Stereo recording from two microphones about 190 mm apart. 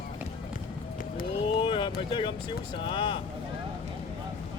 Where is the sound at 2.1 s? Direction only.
25° left (ahead or behind).